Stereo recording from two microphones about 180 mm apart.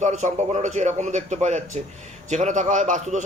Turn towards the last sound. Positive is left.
turn(degrees=-45)  # may be behind; listen again after turning